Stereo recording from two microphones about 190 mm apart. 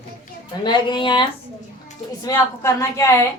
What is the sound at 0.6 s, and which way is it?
A man's voice, 25° left (ahead or behind).